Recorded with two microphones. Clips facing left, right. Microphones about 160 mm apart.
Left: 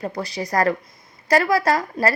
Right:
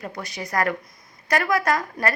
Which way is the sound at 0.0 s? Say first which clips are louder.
Left 6 dB; 30° left (ahead or behind).